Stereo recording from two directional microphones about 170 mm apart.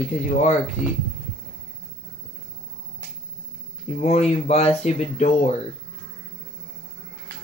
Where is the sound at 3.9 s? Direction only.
40° left (ahead or behind).